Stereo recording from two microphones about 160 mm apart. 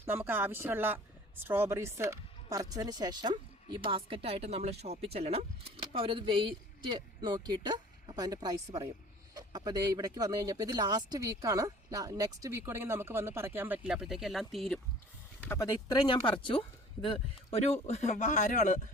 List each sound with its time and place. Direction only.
0.0 s speech: 15° right (ahead or behind)
15.4 s speech: 20° left (ahead or behind); by 18.8 s 55° left (ahead or behind)